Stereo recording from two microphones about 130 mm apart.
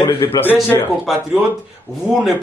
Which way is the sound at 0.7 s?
25° left (ahead or behind).